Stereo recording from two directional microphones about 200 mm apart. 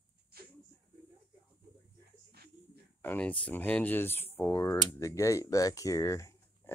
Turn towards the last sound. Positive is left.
turn(degrees=15)  # may be behind; listen again after turning